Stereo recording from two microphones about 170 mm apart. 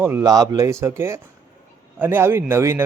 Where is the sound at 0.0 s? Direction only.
15° right (ahead or behind).